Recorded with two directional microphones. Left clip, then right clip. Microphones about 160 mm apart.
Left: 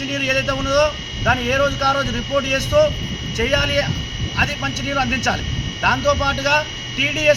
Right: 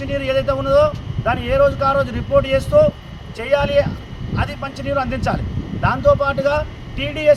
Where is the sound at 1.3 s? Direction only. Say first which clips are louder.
Right 2 dB; 25° right (ahead or behind).